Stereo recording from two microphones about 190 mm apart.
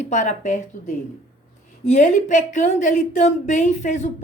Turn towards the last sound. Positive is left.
turn(degrees=40)  # may be behind; listen again after turning